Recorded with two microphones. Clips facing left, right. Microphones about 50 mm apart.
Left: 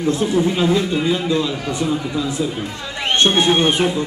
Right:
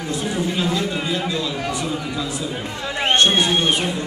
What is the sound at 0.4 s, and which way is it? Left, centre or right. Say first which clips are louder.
A man's voice: left 3 dB; left.